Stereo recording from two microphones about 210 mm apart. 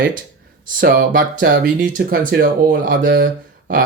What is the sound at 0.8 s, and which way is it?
Speech, 45° right (ahead or behind).